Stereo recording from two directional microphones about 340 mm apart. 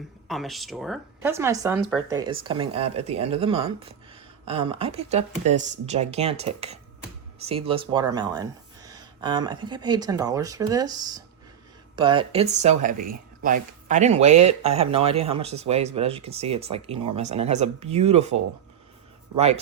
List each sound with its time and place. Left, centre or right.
0.3 s speech: centre